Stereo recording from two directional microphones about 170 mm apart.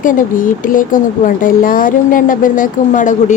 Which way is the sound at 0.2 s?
55° left (ahead or behind).